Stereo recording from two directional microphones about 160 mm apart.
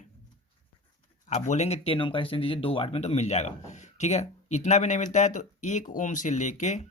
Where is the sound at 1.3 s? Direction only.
50° left (ahead or behind).